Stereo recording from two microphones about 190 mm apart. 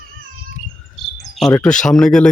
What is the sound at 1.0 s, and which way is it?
Cricket, centre (ahead or behind).